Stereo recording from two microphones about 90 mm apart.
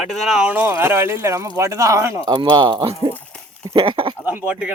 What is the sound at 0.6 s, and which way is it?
Speech, 30° right (ahead or behind).